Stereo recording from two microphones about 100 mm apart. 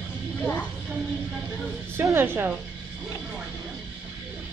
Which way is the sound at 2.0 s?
20° right (ahead or behind).